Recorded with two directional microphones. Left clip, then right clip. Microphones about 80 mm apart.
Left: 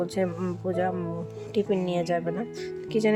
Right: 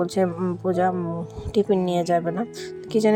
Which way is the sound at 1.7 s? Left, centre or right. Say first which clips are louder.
Right 5 dB; right.